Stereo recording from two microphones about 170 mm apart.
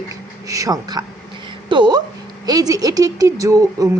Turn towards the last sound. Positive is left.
turn(degrees=-20)  # may be behind; listen again after turning